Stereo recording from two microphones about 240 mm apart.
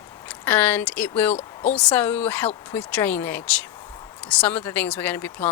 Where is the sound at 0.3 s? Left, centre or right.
Centre.